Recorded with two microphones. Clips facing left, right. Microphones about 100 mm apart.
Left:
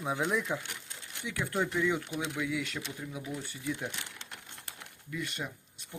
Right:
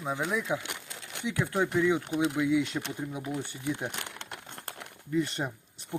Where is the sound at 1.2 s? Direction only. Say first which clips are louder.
Right 4 dB; 20° right (ahead or behind).